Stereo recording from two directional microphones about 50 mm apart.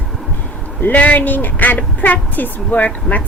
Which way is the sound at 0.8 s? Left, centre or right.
Left.